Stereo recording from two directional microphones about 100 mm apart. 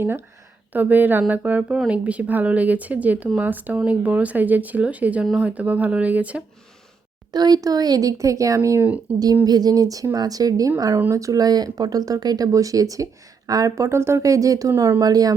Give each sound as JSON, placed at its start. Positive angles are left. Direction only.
{"t": 0.7, "sound": "speech", "side_deg": -15}
{"t": 7.3, "sound": "speech", "side_deg": -40}